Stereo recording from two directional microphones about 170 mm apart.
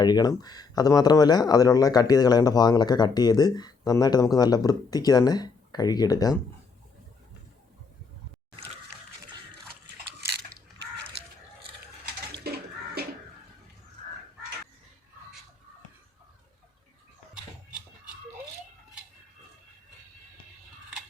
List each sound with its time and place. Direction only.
0.0 s speech: 25° left (ahead or behind)
12.4 s bathtub: 65° right (ahead or behind)